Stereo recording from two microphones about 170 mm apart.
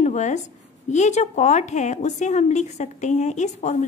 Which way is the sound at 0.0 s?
45° left (ahead or behind).